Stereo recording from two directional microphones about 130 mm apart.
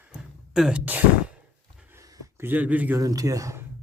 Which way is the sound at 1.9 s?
20° right (ahead or behind).